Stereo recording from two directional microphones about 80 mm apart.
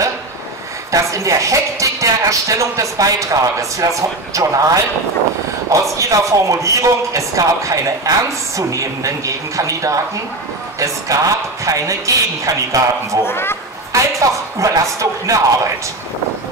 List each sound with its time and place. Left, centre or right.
0.9 s a woman's voice: right
5.9 s a woman's voice: right
13.2 s speech: left
13.9 s speech: right